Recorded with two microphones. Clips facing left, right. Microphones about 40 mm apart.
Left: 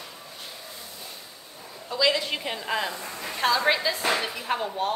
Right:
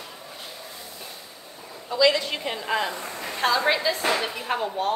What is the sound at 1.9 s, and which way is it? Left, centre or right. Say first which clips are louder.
A woman's voice: right 3 dB; centre.